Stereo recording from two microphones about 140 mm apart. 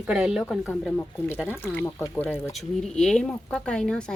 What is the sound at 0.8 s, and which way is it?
A woman's voice, 5° left (ahead or behind).